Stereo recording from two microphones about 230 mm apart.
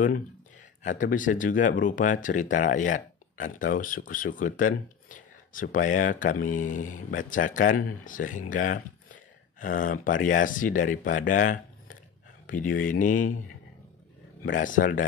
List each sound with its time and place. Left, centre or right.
0.8 s speech: left
14.4 s speech: left